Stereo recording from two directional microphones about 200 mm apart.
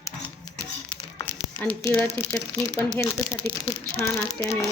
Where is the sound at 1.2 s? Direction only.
10° left (ahead or behind).